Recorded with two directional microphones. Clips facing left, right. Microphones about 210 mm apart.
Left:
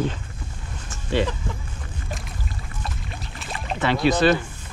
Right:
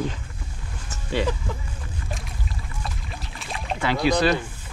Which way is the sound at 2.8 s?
Centre (ahead or behind).